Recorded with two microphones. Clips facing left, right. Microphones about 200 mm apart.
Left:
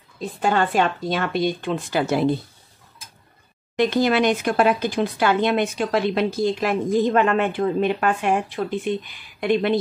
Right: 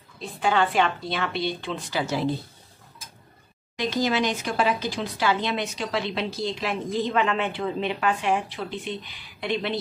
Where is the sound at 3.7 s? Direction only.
60° left (ahead or behind).